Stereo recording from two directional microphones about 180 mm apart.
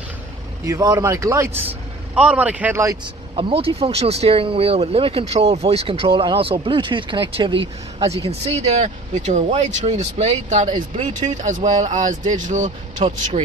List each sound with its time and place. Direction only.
0.7 s speech: 20° right (ahead or behind)
3.3 s speech: 30° right (ahead or behind)